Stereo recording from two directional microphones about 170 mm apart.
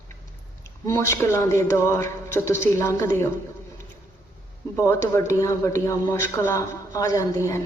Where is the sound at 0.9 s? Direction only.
15° left (ahead or behind).